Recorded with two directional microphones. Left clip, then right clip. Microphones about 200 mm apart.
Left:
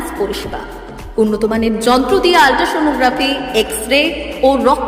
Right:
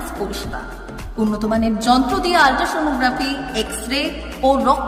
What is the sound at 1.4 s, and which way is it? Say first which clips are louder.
A woman's voice: left 4 dB; 10° left (ahead or behind).